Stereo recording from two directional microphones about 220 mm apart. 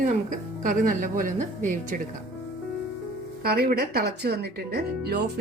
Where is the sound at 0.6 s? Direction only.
40° right (ahead or behind).